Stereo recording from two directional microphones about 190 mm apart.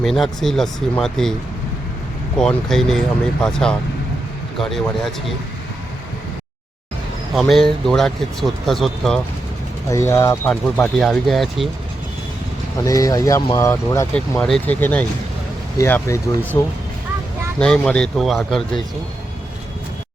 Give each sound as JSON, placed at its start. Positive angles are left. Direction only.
{"t": 0.0, "sound": "speech", "side_deg": 0}
{"t": 2.4, "sound": "speech", "side_deg": 5}
{"t": 7.3, "sound": "speech", "side_deg": 0}
{"t": 9.9, "sound": "speech", "side_deg": 15}
{"t": 12.8, "sound": "speech", "side_deg": 20}
{"t": 14.2, "sound": "speech", "side_deg": 5}